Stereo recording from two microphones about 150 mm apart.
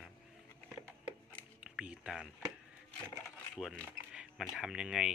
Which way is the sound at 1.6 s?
5° right (ahead or behind).